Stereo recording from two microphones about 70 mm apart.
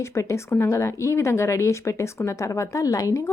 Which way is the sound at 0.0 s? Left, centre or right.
Left.